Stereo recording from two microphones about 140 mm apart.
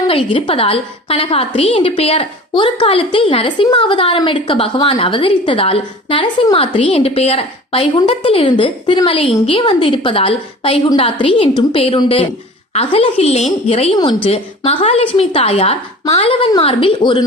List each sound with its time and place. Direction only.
0.1 s a woman's voice: 40° left (ahead or behind)
13.9 s a woman's voice: 35° left (ahead or behind)
14.3 s a woman's voice: 45° left (ahead or behind)